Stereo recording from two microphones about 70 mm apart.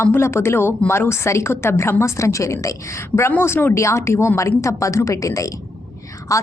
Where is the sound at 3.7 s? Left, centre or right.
Left.